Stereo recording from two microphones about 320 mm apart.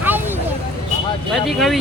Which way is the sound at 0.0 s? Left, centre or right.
Centre.